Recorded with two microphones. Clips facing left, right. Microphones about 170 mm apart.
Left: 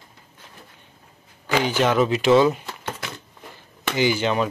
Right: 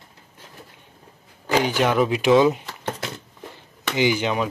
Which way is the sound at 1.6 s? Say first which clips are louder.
Left 1 dB; 10° right (ahead or behind).